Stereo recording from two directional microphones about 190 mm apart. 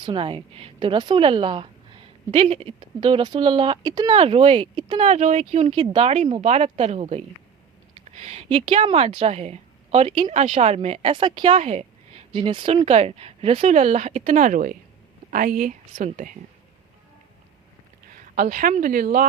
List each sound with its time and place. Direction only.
0.0 s a woman's voice: 25° right (ahead or behind); by 16.3 s 45° right (ahead or behind)
18.1 s speech: 45° right (ahead or behind)